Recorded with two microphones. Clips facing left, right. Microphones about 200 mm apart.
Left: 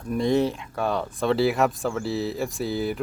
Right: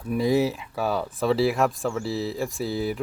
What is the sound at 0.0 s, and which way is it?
Speech, 5° right (ahead or behind).